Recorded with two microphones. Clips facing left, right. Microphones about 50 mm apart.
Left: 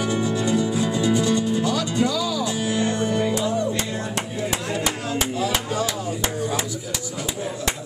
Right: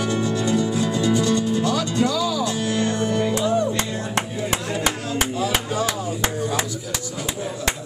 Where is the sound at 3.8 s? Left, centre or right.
Right.